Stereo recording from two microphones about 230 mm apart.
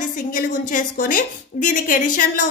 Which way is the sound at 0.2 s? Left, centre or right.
Left.